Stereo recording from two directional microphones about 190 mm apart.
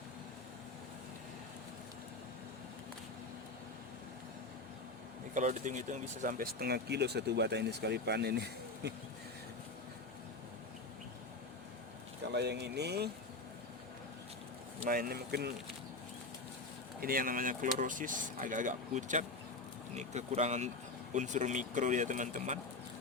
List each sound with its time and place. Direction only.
5.3 s speech: 40° right (ahead or behind); by 8.9 s 60° right (ahead or behind)
12.3 s speech: 60° right (ahead or behind)
14.8 s speech: 50° right (ahead or behind)
17.0 s speech: 50° right (ahead or behind)